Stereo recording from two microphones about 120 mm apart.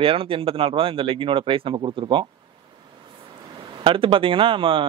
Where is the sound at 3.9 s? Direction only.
45° right (ahead or behind).